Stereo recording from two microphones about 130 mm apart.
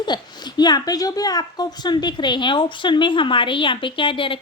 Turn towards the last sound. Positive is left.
turn(degrees=40)  # may be behind; listen again after turning